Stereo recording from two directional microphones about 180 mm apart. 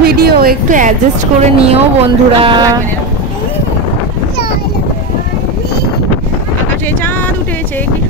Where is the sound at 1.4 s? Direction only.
35° right (ahead or behind).